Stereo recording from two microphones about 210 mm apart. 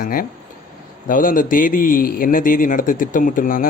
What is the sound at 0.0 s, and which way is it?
A man's voice, 40° left (ahead or behind).